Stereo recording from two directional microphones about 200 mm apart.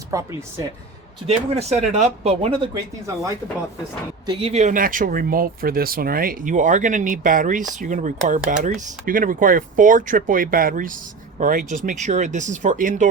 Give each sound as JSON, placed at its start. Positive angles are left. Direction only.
{"t": 0.1, "sound": "speech", "side_deg": -15}
{"t": 1.3, "sound": "speech", "side_deg": -30}
{"t": 4.3, "sound": "speech", "side_deg": -25}